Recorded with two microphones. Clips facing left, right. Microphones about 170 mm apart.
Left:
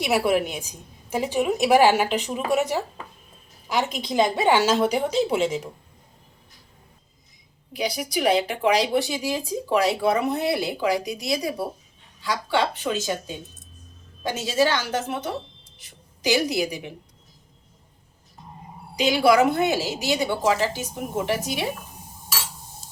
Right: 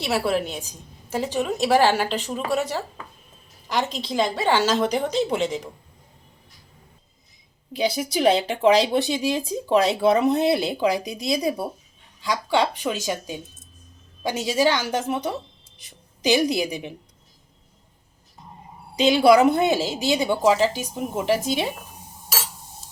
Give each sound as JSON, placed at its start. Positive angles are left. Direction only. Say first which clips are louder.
{"t": 0.0, "sound": "a woman's voice", "louder": "left 2 dB", "side_deg": 15}
{"t": 7.7, "sound": "a woman's voice", "louder": "right 3 dB", "side_deg": -25}
{"t": 18.9, "sound": "a woman's voice", "louder": "right 3 dB", "side_deg": -25}